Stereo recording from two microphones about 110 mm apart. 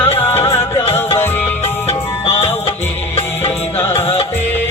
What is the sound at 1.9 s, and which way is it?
Music, 65° left (ahead or behind).